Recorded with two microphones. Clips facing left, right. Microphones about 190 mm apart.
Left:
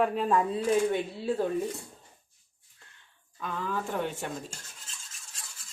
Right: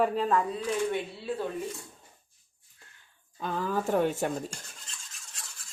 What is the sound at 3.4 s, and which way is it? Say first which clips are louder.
Rub: right 3 dB; 35° right (ahead or behind).